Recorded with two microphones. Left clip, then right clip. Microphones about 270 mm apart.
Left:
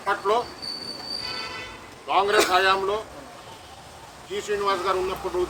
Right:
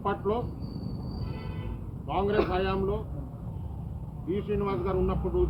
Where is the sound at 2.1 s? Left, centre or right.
Centre.